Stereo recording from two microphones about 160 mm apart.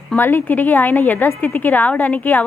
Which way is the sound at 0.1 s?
10° left (ahead or behind).